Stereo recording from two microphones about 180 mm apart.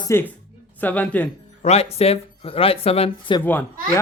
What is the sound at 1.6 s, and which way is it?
Speech, 35° left (ahead or behind).